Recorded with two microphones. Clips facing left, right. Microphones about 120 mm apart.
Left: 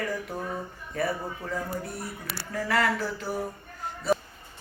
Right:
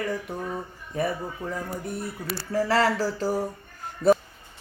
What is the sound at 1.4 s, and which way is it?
Speech, 15° right (ahead or behind).